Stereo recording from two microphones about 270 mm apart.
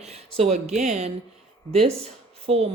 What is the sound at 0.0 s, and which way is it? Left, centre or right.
Speech, right.